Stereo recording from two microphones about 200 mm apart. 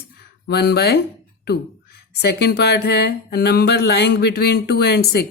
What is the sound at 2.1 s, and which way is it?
Speech, 55° left (ahead or behind).